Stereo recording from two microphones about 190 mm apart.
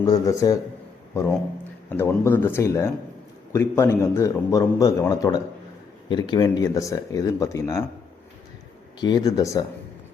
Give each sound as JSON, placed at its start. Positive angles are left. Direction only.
{"t": 0.0, "sound": "speech", "side_deg": 20}
{"t": 1.9, "sound": "a man's voice", "side_deg": 15}
{"t": 9.0, "sound": "speech", "side_deg": 20}